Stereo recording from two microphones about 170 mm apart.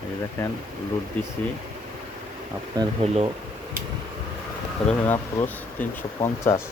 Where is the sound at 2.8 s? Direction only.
25° right (ahead or behind).